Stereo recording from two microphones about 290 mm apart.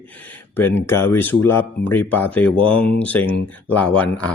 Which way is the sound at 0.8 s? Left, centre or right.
Centre.